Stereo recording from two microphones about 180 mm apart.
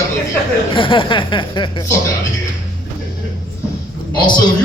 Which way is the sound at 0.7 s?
30° left (ahead or behind).